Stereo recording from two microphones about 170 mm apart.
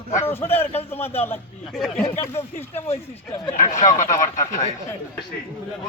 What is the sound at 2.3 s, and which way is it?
A man's voice, 35° left (ahead or behind).